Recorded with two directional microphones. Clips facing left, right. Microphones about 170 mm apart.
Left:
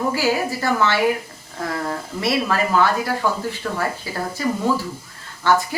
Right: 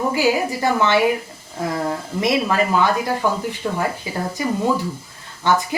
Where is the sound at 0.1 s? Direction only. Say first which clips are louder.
Right 2 dB; 20° right (ahead or behind).